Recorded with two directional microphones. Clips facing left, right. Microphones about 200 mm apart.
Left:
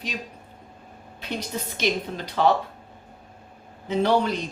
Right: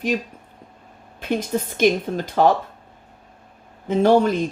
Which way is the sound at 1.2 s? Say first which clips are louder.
Right 8 dB; 50° right (ahead or behind).